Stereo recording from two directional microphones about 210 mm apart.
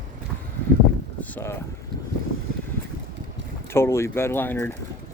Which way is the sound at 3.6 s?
10° left (ahead or behind).